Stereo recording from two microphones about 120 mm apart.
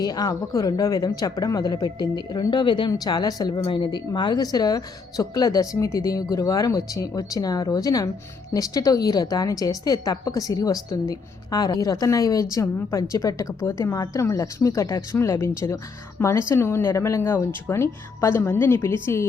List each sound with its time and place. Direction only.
0.0 s speech: 30° left (ahead or behind)